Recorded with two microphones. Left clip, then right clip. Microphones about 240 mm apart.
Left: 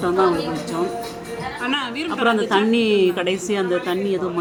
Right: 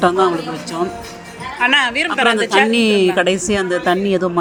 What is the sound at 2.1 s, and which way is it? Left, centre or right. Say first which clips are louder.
A woman's voice: right 4 dB; right.